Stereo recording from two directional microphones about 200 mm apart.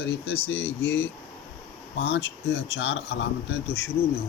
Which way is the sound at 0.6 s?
10° left (ahead or behind).